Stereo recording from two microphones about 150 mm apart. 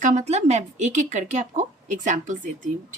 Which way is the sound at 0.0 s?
50° right (ahead or behind).